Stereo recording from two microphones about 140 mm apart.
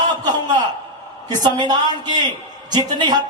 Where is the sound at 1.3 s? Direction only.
30° right (ahead or behind).